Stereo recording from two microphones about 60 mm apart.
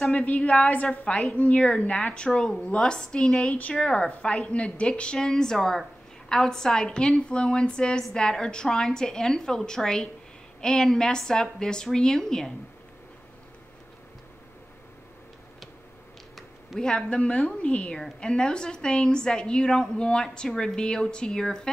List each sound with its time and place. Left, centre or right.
0.1 s a woman's voice: left
16.8 s a woman's voice: centre